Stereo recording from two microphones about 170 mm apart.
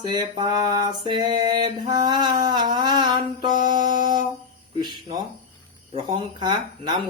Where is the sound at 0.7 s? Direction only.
25° right (ahead or behind).